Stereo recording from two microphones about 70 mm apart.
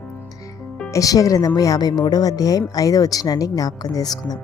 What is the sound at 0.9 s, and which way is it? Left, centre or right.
Speech, left.